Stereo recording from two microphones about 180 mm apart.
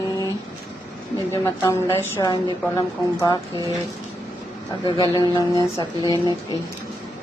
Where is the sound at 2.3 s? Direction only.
20° left (ahead or behind).